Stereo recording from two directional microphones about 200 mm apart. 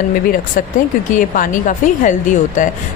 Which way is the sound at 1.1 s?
40° left (ahead or behind).